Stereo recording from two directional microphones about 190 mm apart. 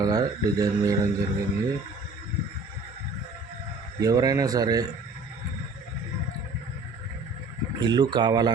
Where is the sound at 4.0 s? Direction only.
20° right (ahead or behind).